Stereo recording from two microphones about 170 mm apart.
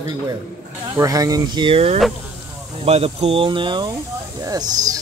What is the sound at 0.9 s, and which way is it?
Speech, 20° right (ahead or behind).